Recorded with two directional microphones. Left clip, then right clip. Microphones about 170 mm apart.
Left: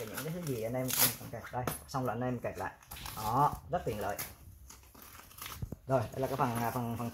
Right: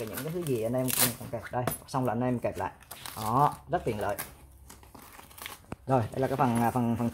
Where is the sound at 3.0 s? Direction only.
15° right (ahead or behind).